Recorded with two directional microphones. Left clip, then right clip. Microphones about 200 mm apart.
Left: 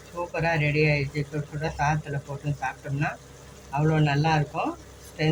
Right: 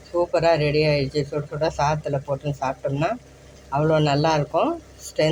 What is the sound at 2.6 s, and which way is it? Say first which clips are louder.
Speech: right 4 dB; 40° right (ahead or behind).